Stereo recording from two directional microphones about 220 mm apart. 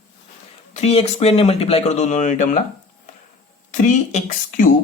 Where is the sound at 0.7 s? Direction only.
30° left (ahead or behind).